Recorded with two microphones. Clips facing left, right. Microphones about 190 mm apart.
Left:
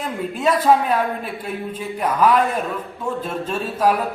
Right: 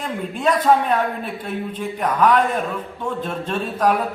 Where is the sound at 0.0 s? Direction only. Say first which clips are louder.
Left 1 dB; 5° left (ahead or behind).